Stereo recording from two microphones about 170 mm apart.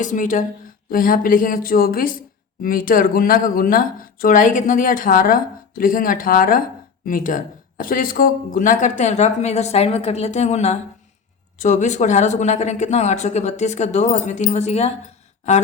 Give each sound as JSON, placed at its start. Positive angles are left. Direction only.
{"t": 0.0, "sound": "speech", "side_deg": 50}